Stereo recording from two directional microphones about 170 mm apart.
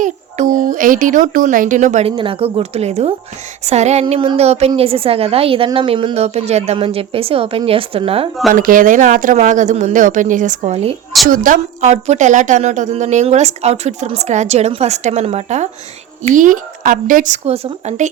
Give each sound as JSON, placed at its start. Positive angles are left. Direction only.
{"t": 0.0, "sound": "a woman's voice", "side_deg": -50}
{"t": 2.1, "sound": "a woman's voice", "side_deg": -30}
{"t": 8.5, "sound": "a woman's voice", "side_deg": -55}
{"t": 11.3, "sound": "a woman's voice", "side_deg": -55}